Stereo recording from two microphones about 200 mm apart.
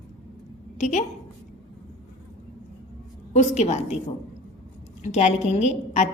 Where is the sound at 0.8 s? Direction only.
35° left (ahead or behind).